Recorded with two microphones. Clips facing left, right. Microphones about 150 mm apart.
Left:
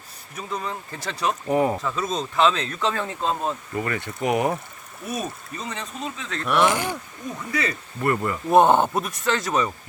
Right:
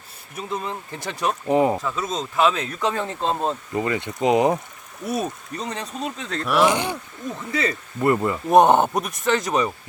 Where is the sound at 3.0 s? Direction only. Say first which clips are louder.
Right 2 dB; 30° right (ahead or behind).